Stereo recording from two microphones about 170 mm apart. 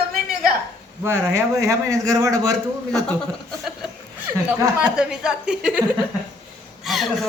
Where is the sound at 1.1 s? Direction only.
15° right (ahead or behind).